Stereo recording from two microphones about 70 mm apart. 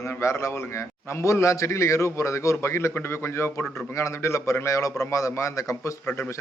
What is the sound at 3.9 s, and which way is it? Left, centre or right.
A man's voice, left.